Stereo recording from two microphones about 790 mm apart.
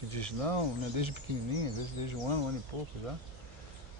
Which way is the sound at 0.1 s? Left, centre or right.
Right.